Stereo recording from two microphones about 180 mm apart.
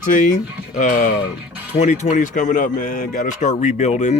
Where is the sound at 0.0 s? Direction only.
45° left (ahead or behind).